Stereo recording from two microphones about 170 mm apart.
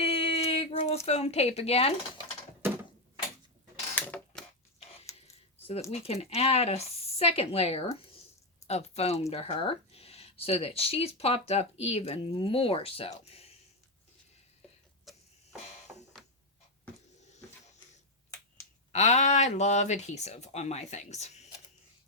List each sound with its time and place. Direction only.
0.0 s female singing: 35° left (ahead or behind)
1.0 s speech: 40° left (ahead or behind)
3.9 s a sound: 10° left (ahead or behind)
5.9 s speech: 35° left (ahead or behind)
15.1 s a sound: centre (ahead or behind)
18.9 s speech: 40° left (ahead or behind)